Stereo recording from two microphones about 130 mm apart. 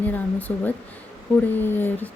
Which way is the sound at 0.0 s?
15° left (ahead or behind).